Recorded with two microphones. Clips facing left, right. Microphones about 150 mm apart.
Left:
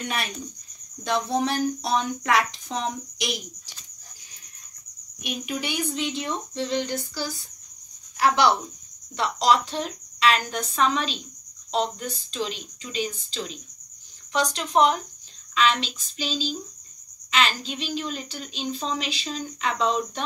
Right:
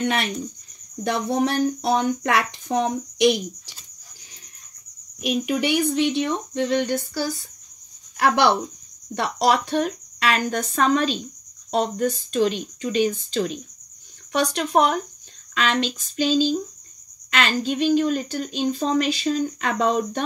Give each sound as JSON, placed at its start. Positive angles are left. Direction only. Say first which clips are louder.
{"t": 0.0, "sound": "speech", "louder": "right 7 dB", "side_deg": -65}
{"t": 5.4, "sound": "speech", "louder": "right 7 dB", "side_deg": -70}